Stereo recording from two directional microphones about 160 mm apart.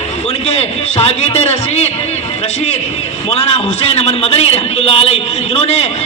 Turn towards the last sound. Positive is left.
turn(degrees=40)  # may be behind; listen again after turning